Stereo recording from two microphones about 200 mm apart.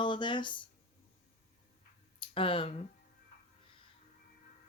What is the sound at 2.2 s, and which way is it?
Speech, 25° left (ahead or behind).